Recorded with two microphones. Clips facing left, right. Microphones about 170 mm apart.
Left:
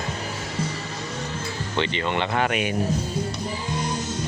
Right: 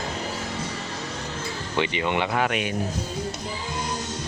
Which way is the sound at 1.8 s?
15° right (ahead or behind).